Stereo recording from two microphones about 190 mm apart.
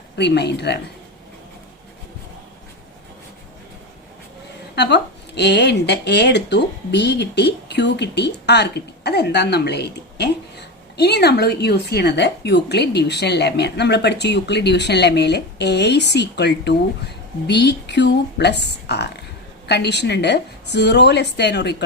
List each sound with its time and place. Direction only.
0.2 s speech: 60° left (ahead or behind)
4.7 s speech: 60° left (ahead or behind)